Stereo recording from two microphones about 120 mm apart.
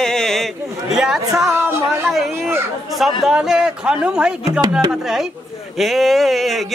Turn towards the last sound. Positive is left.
turn(degrees=0)  # may be behind; listen again after turning